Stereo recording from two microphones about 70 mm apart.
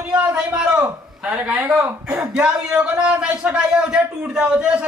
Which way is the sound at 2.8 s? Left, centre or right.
Centre.